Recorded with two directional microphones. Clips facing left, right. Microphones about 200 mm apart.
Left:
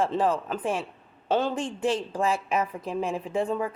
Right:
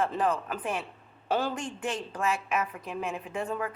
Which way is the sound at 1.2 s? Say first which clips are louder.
Left 4 dB; 25° left (ahead or behind).